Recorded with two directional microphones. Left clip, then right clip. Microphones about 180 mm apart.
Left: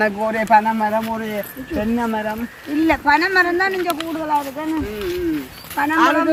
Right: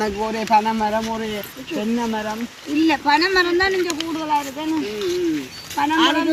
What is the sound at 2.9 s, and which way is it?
Speech, 15° left (ahead or behind).